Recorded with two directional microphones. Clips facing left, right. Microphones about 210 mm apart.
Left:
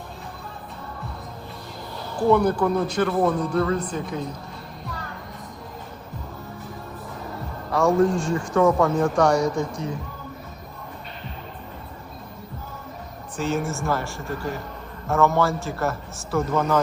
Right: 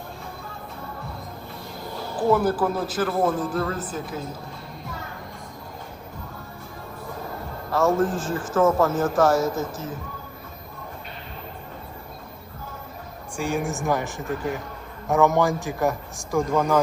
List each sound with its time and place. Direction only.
2.3 s a man's voice: 5° right (ahead or behind)
7.7 s a man's voice: centre (ahead or behind)
13.3 s a man's voice: 15° right (ahead or behind)